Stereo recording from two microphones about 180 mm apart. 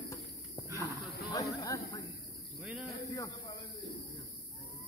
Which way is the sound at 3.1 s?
20° left (ahead or behind).